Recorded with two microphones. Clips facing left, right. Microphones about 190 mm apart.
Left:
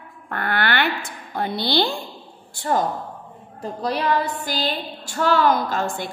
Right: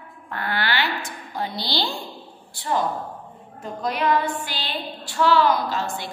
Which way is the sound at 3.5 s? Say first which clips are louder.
Left 2 dB; 35° left (ahead or behind).